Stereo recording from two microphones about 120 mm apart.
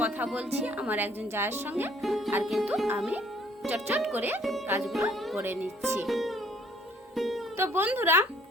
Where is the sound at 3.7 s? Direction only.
15° right (ahead or behind).